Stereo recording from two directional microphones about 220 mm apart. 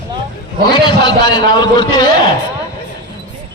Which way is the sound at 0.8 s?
20° left (ahead or behind).